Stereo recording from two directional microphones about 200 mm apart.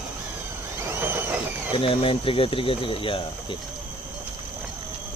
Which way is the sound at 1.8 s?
25° left (ahead or behind).